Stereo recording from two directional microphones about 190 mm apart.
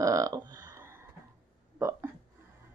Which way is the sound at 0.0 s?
15° right (ahead or behind).